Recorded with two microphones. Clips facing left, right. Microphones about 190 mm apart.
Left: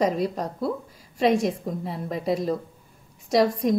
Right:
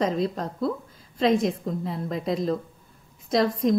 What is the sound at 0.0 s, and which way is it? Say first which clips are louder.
A woman's voice: left 1 dB; 10° left (ahead or behind).